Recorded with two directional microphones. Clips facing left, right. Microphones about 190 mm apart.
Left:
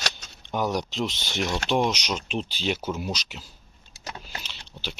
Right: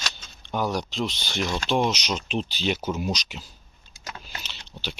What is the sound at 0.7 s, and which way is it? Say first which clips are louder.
Speech: even; 20° left (ahead or behind).